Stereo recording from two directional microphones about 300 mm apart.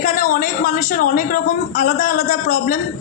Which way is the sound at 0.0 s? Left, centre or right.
Left.